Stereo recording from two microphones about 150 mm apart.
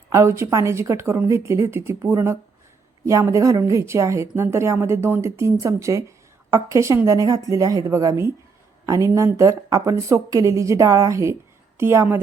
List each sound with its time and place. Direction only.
0.1 s a woman's voice: 20° right (ahead or behind)